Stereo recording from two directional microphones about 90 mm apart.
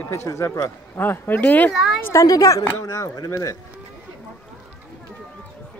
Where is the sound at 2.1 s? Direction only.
40° left (ahead or behind).